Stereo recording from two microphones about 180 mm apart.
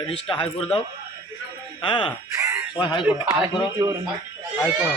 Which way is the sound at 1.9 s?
25° left (ahead or behind).